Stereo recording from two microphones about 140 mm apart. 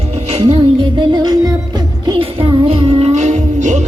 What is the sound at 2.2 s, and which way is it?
Music, 40° right (ahead or behind).